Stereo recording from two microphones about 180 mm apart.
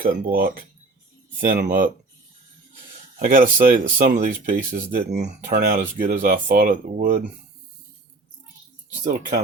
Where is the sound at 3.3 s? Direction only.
50° right (ahead or behind).